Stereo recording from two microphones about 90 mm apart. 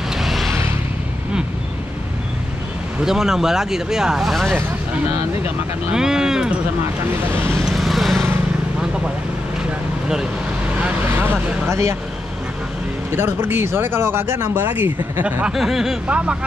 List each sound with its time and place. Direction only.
0.2 s a sound: centre (ahead or behind)
3.0 s speech: 5° right (ahead or behind)
5.9 s speech: 5° right (ahead or behind)
7.1 s speech: 25° right (ahead or behind)
7.6 s vehicle: centre (ahead or behind)
11.1 s speech: 25° right (ahead or behind)
13.1 s speech: 25° right (ahead or behind)
15.4 s speech: 5° right (ahead or behind)